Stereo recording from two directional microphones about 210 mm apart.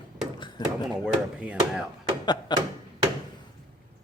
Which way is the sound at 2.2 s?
20° left (ahead or behind).